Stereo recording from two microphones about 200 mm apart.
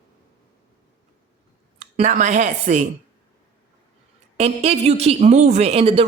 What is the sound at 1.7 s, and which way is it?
A woman's voice, 35° right (ahead or behind).